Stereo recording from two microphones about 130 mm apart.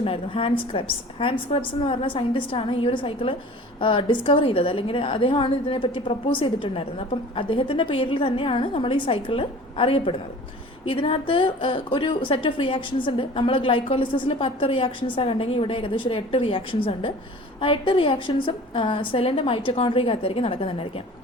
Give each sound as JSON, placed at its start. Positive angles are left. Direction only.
{"t": 0.0, "sound": "a woman's voice", "side_deg": 45}